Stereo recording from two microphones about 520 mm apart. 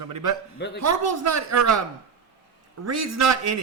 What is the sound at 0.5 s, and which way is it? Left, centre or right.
Speech, centre.